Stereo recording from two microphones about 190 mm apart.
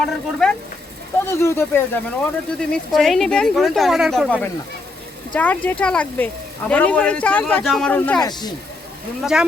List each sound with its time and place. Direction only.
0.0 s speech: 5° left (ahead or behind)
2.6 s speech: centre (ahead or behind)
8.2 s speech: 20° left (ahead or behind)
9.2 s speech: 5° right (ahead or behind)